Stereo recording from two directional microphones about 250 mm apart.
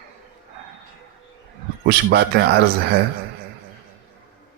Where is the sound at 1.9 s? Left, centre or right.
Right.